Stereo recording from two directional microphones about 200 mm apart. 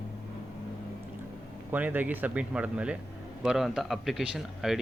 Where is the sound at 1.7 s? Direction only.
10° right (ahead or behind).